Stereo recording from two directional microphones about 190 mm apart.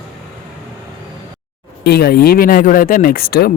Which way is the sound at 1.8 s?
55° left (ahead or behind).